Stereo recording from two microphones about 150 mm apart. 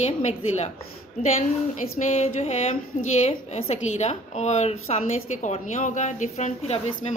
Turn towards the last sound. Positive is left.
turn(degrees=50)  # may be behind; listen again after turning